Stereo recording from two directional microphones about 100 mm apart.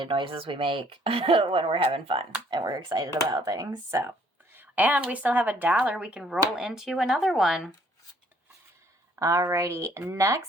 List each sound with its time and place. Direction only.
0.0 s a woman's voice: 60° right (ahead or behind)
2.5 s speech: 40° right (ahead or behind)
4.5 s a woman's voice: 15° right (ahead or behind)
9.1 s speech: 35° right (ahead or behind)